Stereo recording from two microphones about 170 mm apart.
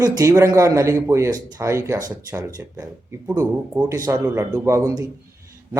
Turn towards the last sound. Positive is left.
turn(degrees=-20)  # may be behind; listen again after turning